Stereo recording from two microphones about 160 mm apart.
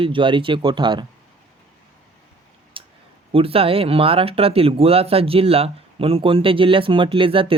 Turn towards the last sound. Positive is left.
turn(degrees=-35)  # may be behind; listen again after turning